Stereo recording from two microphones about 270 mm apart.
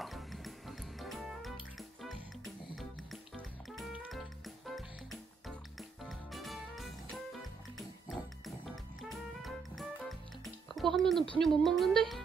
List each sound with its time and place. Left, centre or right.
0.0 s music: centre
5.8 s music: centre
11.3 s speech: centre